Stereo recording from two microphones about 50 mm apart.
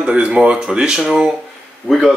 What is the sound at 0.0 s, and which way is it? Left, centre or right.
Speech, centre.